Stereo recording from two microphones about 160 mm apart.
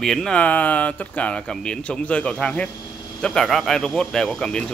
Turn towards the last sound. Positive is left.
turn(degrees=5)  # may be behind; listen again after turning